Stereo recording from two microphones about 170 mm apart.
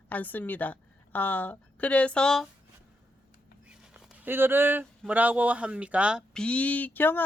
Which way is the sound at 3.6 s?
5° right (ahead or behind).